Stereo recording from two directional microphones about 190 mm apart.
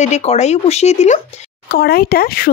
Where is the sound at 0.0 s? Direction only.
35° left (ahead or behind).